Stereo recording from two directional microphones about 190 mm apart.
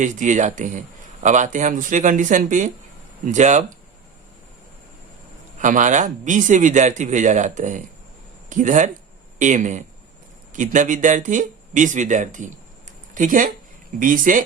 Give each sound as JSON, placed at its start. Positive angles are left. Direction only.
{"t": 0.0, "sound": "speech", "side_deg": -40}
{"t": 5.5, "sound": "speech", "side_deg": -40}